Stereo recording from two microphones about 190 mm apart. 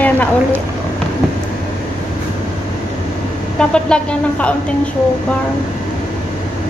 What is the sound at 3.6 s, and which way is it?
Speech, 5° left (ahead or behind).